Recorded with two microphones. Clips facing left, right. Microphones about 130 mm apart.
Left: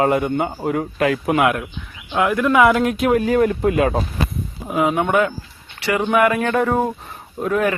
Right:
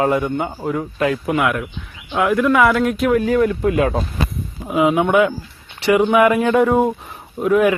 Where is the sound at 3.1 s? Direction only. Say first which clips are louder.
Even; 45° left (ahead or behind).